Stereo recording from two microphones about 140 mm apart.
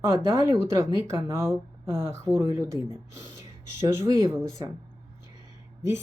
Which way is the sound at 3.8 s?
20° right (ahead or behind).